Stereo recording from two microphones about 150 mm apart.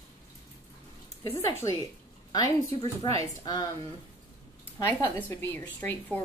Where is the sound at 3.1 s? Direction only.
25° left (ahead or behind).